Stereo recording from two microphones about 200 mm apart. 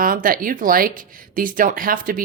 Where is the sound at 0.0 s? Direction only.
45° right (ahead or behind).